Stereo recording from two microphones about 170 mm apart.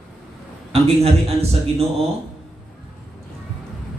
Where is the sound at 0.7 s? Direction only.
35° right (ahead or behind).